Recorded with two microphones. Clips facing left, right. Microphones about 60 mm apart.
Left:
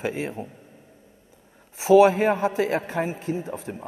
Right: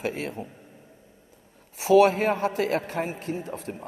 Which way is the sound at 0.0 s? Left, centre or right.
Left.